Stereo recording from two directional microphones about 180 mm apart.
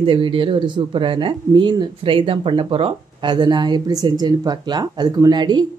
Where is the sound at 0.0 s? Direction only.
30° right (ahead or behind).